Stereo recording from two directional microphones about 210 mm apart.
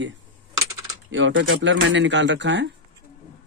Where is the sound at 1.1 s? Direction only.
60° right (ahead or behind).